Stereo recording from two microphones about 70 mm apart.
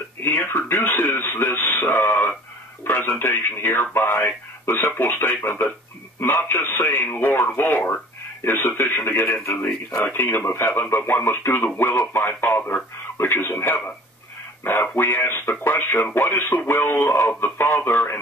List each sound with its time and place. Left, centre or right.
0.2 s speech: left